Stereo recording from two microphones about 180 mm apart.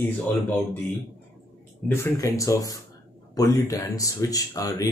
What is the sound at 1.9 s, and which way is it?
Speech, 15° left (ahead or behind).